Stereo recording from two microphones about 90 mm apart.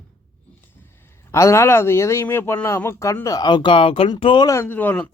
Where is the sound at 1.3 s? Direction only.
35° left (ahead or behind).